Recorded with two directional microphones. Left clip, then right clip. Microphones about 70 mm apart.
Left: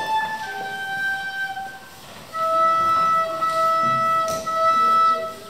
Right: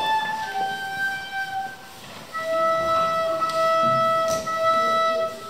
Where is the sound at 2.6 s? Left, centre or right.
Centre.